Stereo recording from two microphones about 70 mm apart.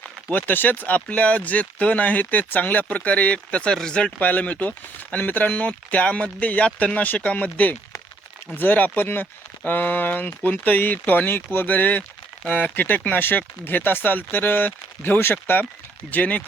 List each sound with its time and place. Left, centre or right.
0.3 s speech: left
16.1 s speech: left